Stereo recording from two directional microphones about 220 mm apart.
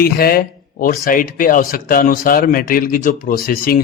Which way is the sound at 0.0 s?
45° left (ahead or behind).